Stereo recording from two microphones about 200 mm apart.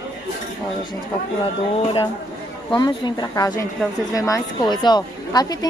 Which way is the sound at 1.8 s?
25° left (ahead or behind).